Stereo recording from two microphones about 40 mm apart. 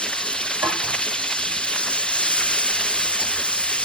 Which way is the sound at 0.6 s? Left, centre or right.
Left.